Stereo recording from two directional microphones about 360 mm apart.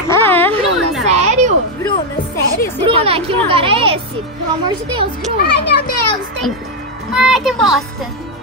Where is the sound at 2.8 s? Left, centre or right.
Centre.